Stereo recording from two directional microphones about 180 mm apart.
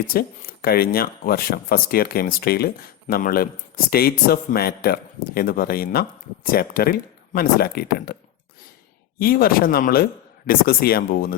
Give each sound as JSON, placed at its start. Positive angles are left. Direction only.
{"t": 0.1, "sound": "speech", "side_deg": 55}
{"t": 9.1, "sound": "speech", "side_deg": 55}